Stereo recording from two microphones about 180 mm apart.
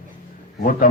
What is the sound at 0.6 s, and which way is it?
Speech, 50° left (ahead or behind).